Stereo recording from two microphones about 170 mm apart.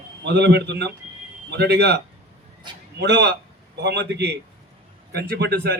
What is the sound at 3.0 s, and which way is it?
A man's voice, 85° right.